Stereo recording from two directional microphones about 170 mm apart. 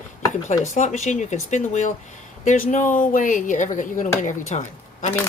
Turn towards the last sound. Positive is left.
turn(degrees=45)  # may be behind; listen again after turning